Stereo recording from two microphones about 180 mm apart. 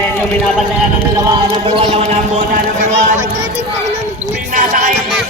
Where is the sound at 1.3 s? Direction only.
25° right (ahead or behind).